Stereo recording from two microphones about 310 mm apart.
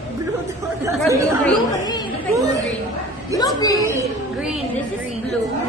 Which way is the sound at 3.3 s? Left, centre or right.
Centre.